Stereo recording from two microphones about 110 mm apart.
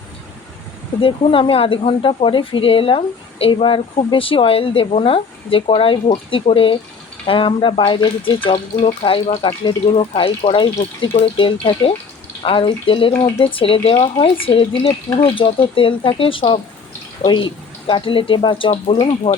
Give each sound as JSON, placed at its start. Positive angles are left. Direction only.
{"t": 1.0, "sound": "speech", "side_deg": 55}
{"t": 8.4, "sound": "speech", "side_deg": 65}
{"t": 9.9, "sound": "speech", "side_deg": 55}
{"t": 13.1, "sound": "speech", "side_deg": 30}
{"t": 13.4, "sound": "speech", "side_deg": 55}
{"t": 18.9, "sound": "speech", "side_deg": 60}